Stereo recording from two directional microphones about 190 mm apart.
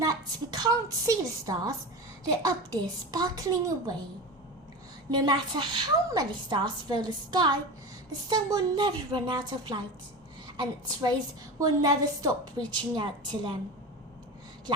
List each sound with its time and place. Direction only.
0.0 s a woman's voice: 20° right (ahead or behind)
3.1 s a woman's voice: 20° right (ahead or behind)
5.1 s a woman's voice: 25° right (ahead or behind)